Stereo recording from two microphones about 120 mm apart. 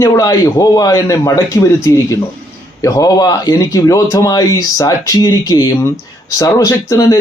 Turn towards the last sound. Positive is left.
turn(degrees=25)  # may be behind; listen again after turning